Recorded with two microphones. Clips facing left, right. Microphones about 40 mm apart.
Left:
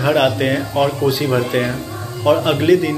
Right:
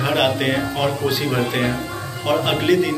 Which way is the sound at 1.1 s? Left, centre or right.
Centre.